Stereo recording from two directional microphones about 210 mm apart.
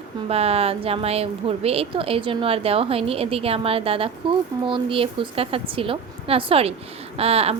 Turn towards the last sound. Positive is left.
turn(degrees=-30)  # may be behind; listen again after turning